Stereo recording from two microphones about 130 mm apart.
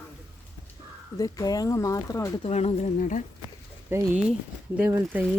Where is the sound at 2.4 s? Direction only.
55° left (ahead or behind); by 3.2 s 80° left.